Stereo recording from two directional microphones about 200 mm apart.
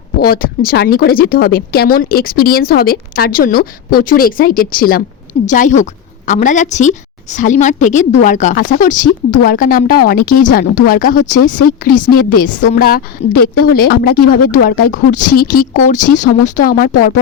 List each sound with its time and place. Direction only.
0.2 s a woman's voice: 50° left (ahead or behind)